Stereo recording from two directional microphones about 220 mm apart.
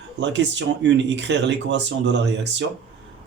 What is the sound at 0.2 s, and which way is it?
Speech, 55° right (ahead or behind).